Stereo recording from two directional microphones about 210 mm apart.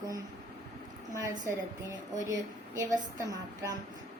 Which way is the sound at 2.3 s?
15° right (ahead or behind).